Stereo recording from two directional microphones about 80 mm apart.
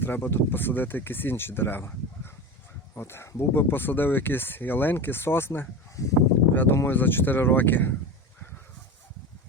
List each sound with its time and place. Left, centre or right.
0.0 s speech: left
6.0 s speech: left
6.5 s speech: left